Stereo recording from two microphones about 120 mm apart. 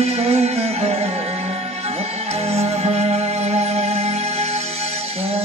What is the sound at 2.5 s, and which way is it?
Music, 65° right (ahead or behind).